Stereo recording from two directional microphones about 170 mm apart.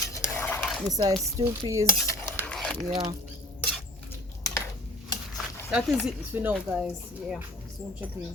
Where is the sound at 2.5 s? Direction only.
5° left (ahead or behind).